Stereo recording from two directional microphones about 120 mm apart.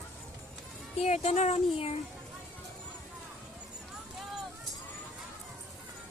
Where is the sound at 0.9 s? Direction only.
65° left (ahead or behind).